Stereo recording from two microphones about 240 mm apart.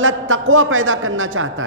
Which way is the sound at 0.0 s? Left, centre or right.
Right.